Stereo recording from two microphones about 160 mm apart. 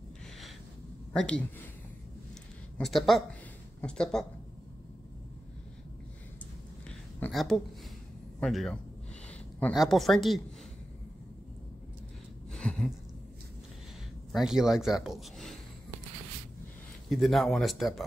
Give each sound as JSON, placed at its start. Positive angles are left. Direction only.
{"t": 1.1, "sound": "speech", "side_deg": 5}
{"t": 2.8, "sound": "speech", "side_deg": 0}
{"t": 7.2, "sound": "a woman's voice", "side_deg": 5}
{"t": 12.5, "sound": "a sound", "side_deg": 5}
{"t": 14.3, "sound": "speech", "side_deg": -5}
{"t": 17.1, "sound": "speech", "side_deg": 0}